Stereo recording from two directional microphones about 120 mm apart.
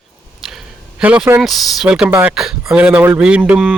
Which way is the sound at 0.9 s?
10° right (ahead or behind).